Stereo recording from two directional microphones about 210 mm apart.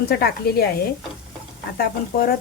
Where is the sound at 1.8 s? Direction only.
45° left (ahead or behind).